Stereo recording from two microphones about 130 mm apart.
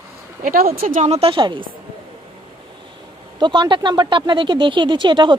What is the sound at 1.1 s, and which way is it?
Speech, 45° right (ahead or behind).